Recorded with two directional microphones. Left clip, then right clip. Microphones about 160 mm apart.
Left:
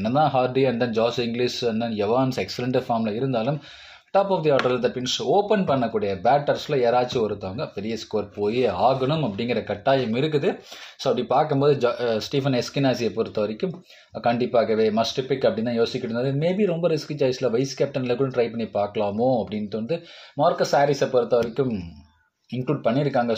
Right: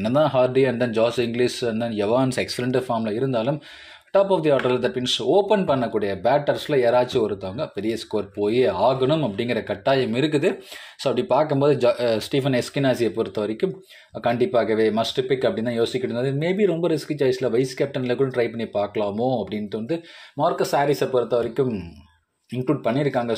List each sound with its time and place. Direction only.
0.0 s speech: 40° right (ahead or behind)